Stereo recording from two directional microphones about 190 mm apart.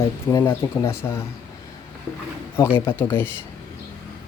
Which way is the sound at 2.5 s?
10° left (ahead or behind).